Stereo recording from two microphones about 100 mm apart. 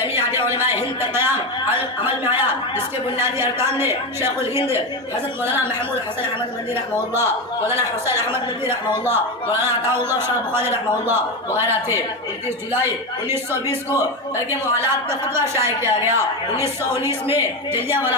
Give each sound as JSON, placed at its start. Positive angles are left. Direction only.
{"t": 0.0, "sound": "a sound", "side_deg": -25}
{"t": 1.1, "sound": "a man's voice", "side_deg": -20}
{"t": 7.1, "sound": "a man's voice", "side_deg": -25}